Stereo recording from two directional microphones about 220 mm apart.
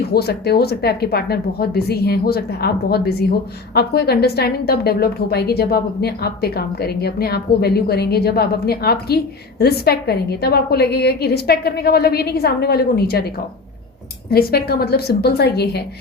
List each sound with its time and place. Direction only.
0.0 s a woman's voice: 45° left (ahead or behind)